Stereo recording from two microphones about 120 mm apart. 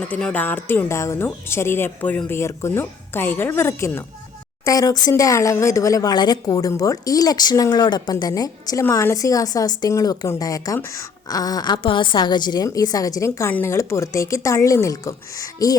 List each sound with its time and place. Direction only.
0.0 s a woman's voice: 10° left (ahead or behind); by 15.8 s 30° left (ahead or behind)